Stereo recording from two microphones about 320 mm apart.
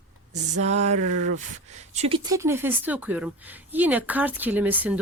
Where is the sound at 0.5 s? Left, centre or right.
Right.